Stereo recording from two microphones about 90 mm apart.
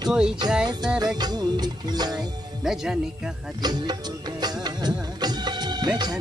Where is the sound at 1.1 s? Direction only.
50° right (ahead or behind).